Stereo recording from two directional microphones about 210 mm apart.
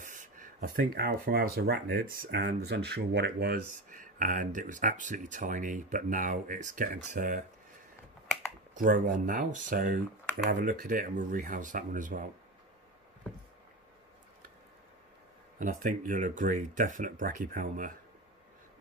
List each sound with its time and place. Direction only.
0.0 s a sound: 35° right (ahead or behind)
0.9 s speech: 45° right (ahead or behind)
8.7 s speech: 40° right (ahead or behind)
15.6 s speech: 40° right (ahead or behind)